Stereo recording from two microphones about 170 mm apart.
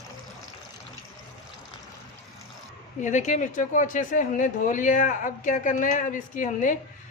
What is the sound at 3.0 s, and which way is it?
Speech, 45° left (ahead or behind).